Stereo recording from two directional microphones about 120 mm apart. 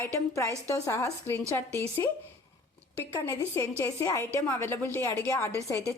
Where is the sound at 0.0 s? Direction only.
25° left (ahead or behind).